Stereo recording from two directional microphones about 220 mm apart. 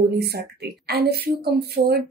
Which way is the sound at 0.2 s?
45° right (ahead or behind).